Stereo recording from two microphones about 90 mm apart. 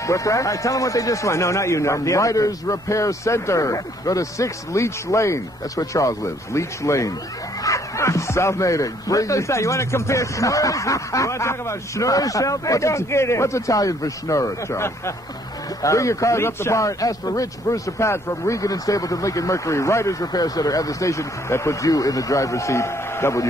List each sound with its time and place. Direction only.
0.0 s a man's voice: 35° left (ahead or behind)